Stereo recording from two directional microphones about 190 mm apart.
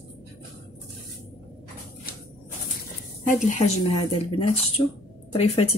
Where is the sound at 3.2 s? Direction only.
40° left (ahead or behind).